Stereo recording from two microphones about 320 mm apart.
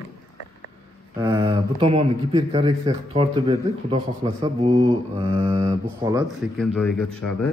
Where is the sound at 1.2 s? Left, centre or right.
Centre.